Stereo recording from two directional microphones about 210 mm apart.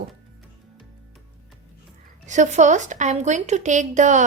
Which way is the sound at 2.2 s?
35° right (ahead or behind).